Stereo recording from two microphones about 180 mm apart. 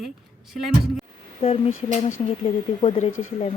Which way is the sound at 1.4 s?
35° left (ahead or behind).